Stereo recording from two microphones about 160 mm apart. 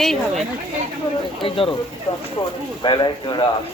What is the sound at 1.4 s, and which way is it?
Speech, 35° left (ahead or behind).